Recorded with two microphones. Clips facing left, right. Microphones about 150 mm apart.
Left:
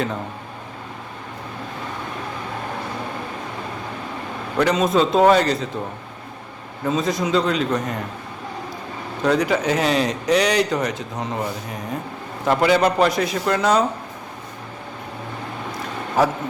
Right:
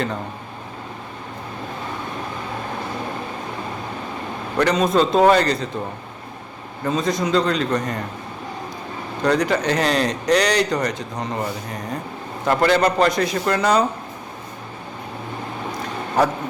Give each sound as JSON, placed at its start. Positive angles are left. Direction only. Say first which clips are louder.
{"t": 4.5, "sound": "speech", "louder": "even", "side_deg": 0}
{"t": 6.8, "sound": "speech", "louder": "even", "side_deg": 0}
{"t": 9.2, "sound": "speech", "louder": "even", "side_deg": 5}
{"t": 16.2, "sound": "speech", "louder": "even", "side_deg": 5}